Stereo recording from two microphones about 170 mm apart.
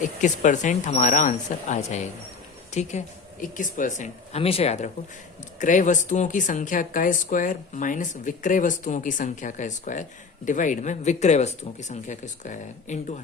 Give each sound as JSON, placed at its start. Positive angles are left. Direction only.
{"t": 0.0, "sound": "speech", "side_deg": 50}